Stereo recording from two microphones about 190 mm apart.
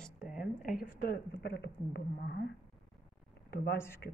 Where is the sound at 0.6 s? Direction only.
45° left (ahead or behind).